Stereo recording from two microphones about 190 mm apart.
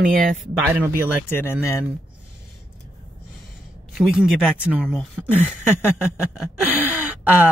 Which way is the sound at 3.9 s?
Centre (ahead or behind).